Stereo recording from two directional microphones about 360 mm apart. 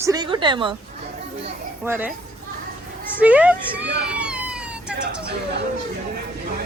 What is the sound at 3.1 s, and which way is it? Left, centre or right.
Speech, centre.